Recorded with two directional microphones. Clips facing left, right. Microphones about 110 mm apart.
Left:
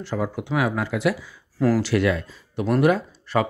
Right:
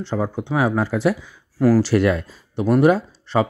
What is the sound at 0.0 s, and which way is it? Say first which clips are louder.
Speech: right 3 dB; 25° right (ahead or behind).